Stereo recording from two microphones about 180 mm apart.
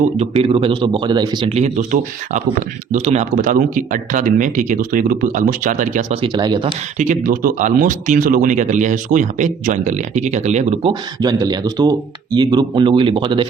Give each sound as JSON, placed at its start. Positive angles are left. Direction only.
{"t": 0.2, "sound": "speech", "side_deg": -30}
{"t": 1.5, "sound": "speech", "side_deg": -40}
{"t": 6.2, "sound": "speech", "side_deg": -25}
{"t": 7.0, "sound": "speech", "side_deg": -45}
{"t": 11.2, "sound": "speech", "side_deg": -20}